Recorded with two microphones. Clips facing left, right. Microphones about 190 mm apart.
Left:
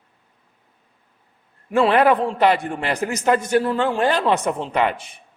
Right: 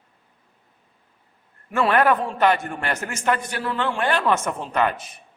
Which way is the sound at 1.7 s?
30° left (ahead or behind).